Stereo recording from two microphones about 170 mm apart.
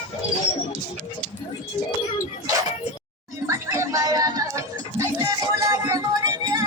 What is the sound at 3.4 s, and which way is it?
Music, 20° right (ahead or behind).